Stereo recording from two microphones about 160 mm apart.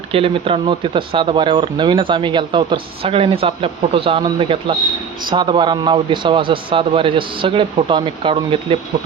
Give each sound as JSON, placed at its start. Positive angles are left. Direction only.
{"t": 0.1, "sound": "speech", "side_deg": -35}